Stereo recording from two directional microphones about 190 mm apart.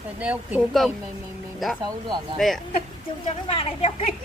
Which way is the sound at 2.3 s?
Centre (ahead or behind).